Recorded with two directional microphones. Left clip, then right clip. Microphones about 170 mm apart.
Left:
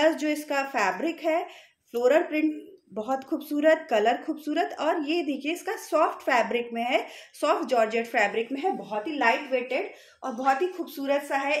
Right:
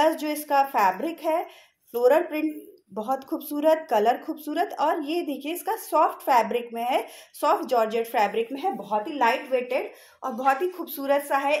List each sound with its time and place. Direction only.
0.0 s a woman's voice: 35° left (ahead or behind)